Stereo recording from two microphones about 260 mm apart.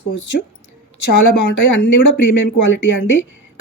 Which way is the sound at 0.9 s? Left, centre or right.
Left.